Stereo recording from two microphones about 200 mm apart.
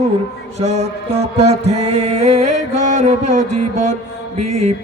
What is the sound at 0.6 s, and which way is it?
Music, 35° right (ahead or behind).